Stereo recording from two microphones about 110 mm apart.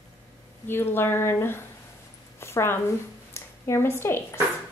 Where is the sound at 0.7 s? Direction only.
20° left (ahead or behind).